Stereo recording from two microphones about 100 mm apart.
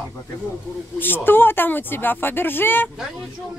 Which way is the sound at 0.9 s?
20° left (ahead or behind).